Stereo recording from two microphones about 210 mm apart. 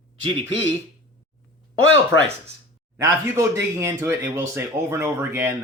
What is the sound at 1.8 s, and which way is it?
Speech, 65° left (ahead or behind).